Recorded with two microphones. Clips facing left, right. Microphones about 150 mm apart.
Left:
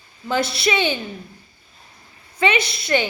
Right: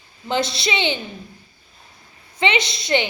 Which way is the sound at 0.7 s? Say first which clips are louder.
Left 3 dB; 20° right (ahead or behind).